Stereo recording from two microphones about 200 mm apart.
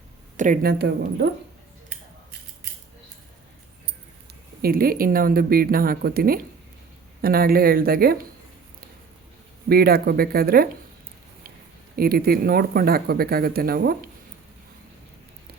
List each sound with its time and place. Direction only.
0.3 s speech: 40° right (ahead or behind); by 1.3 s 55° right (ahead or behind)
4.6 s speech: 45° right (ahead or behind)
9.6 s speech: 50° right (ahead or behind)
11.9 s speech: 50° right (ahead or behind)